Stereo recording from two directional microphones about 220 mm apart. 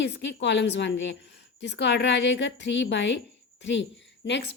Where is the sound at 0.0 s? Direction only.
55° left (ahead or behind).